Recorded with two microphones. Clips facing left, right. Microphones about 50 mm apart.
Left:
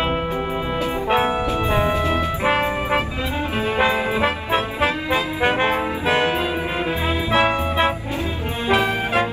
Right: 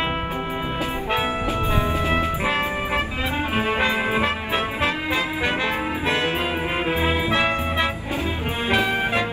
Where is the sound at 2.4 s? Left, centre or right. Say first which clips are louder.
Left 3 dB; left.